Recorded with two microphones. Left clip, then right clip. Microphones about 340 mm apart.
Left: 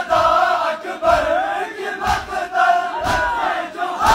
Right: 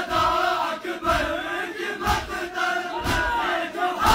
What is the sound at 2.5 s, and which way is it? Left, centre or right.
Crowd, centre.